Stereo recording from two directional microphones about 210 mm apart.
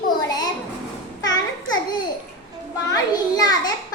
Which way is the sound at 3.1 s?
20° left (ahead or behind).